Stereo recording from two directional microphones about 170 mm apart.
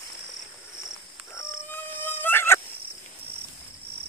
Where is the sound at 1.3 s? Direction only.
15° left (ahead or behind).